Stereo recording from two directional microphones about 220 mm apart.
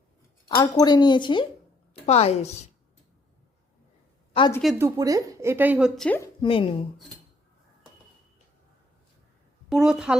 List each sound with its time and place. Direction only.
0.4 s speech: 20° left (ahead or behind)
4.4 s speech: 20° left (ahead or behind)
4.6 s a woman's voice: 5° right (ahead or behind)
4.9 s a woman's voice: 15° right (ahead or behind)
6.4 s speech: 25° left (ahead or behind)
9.6 s a woman's voice: 5° right (ahead or behind)